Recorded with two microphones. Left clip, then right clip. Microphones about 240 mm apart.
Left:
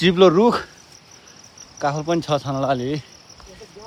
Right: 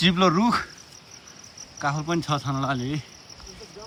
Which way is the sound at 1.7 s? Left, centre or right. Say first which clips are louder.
Left 5 dB; left.